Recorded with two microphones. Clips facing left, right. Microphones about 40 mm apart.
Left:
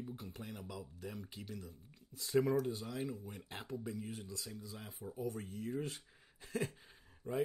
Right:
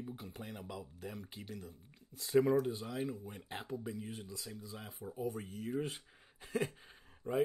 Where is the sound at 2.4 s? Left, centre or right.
Centre.